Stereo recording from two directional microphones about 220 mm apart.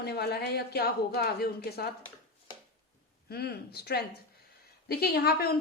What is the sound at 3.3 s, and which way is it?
Speech, 45° left (ahead or behind).